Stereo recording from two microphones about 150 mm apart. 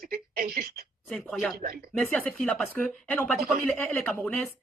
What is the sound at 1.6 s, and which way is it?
Speech, 75° right (ahead or behind).